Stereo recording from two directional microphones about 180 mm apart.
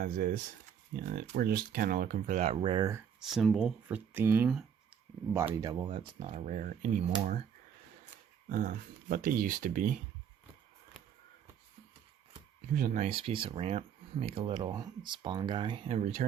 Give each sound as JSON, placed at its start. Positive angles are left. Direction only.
{"t": 0.0, "sound": "speech", "side_deg": -50}
{"t": 2.6, "sound": "speech", "side_deg": -25}
{"t": 3.2, "sound": "speech", "side_deg": 0}
{"t": 6.2, "sound": "speech", "side_deg": -40}
{"t": 8.4, "sound": "speech", "side_deg": -50}
{"t": 12.7, "sound": "speech", "side_deg": -45}